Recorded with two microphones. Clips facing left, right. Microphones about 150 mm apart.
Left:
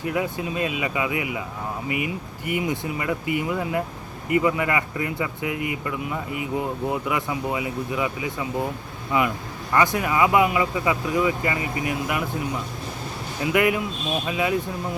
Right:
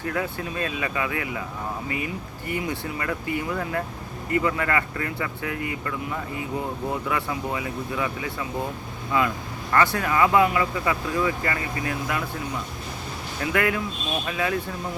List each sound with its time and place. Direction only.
0.0 s speech: 15° left (ahead or behind)
2.5 s speech: 15° left (ahead or behind)
13.4 s speech: 15° left (ahead or behind)